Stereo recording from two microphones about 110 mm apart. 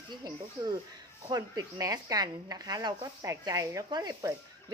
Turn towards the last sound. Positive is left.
turn(degrees=-35)  # may be behind; listen again after turning